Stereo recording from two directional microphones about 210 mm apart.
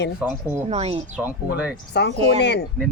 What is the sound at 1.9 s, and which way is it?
Speech, 50° left (ahead or behind).